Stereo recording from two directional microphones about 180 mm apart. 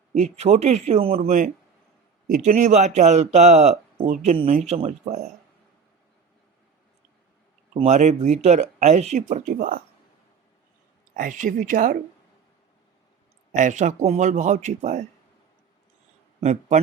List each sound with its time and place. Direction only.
0.1 s speech: 40° right (ahead or behind)
2.2 s speech: 40° right (ahead or behind)
7.8 s speech: 40° right (ahead or behind)
11.2 s a woman's voice: 45° right (ahead or behind)
13.5 s speech: 45° right (ahead or behind)
16.4 s speech: 40° right (ahead or behind)